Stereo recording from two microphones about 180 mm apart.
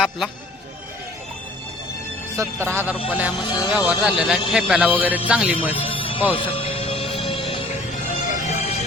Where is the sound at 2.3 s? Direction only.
15° right (ahead or behind).